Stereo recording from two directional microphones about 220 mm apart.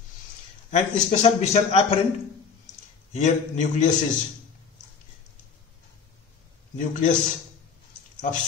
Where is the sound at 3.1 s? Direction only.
30° left (ahead or behind).